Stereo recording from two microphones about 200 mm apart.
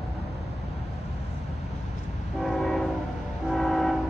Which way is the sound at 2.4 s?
Centre (ahead or behind).